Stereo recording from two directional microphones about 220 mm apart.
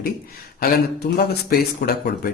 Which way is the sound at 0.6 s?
45° left (ahead or behind).